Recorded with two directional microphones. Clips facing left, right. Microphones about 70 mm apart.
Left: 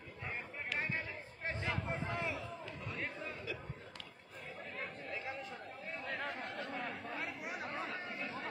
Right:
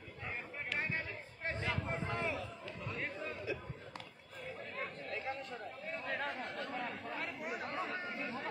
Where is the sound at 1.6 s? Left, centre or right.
Centre.